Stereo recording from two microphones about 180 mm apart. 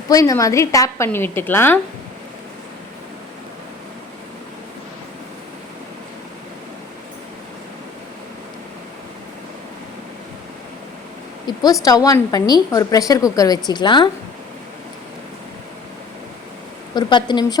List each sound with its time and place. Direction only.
0.1 s a woman's voice: 20° left (ahead or behind)
11.4 s a woman's voice: 20° left (ahead or behind)
16.9 s a woman's voice: 25° left (ahead or behind)